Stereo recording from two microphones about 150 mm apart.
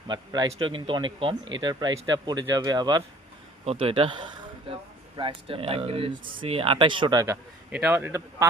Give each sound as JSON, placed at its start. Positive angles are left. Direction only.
{"t": 0.1, "sound": "speech", "side_deg": -30}
{"t": 3.7, "sound": "speech", "side_deg": -40}
{"t": 5.1, "sound": "speech", "side_deg": -35}
{"t": 7.7, "sound": "a man's voice", "side_deg": -15}